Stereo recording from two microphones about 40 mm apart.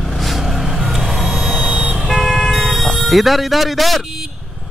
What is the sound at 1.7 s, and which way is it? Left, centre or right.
Vehicle, right.